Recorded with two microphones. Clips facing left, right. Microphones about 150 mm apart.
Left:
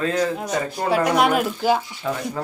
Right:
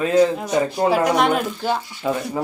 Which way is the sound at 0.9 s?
Centre (ahead or behind).